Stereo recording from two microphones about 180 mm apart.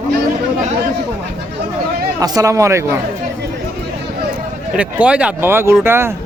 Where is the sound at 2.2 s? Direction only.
20° right (ahead or behind).